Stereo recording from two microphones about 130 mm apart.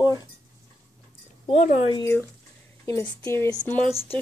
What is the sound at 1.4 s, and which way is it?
Speech, 60° left (ahead or behind).